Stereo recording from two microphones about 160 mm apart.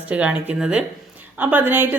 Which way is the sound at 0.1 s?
5° right (ahead or behind).